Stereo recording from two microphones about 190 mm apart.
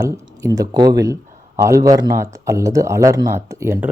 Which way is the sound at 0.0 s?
15° right (ahead or behind).